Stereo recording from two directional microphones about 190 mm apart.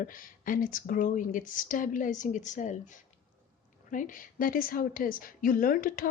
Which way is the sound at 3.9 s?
45° left (ahead or behind).